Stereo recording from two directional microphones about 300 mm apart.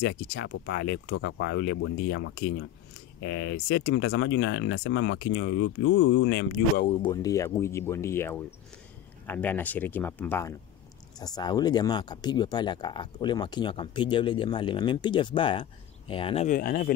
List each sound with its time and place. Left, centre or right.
0.0 s speech: left
6.9 s speech: centre